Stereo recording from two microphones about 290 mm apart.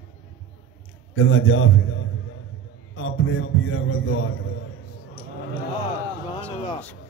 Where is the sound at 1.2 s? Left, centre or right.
Left.